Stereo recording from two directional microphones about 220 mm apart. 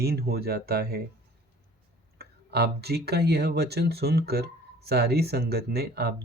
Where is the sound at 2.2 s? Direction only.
50° right (ahead or behind).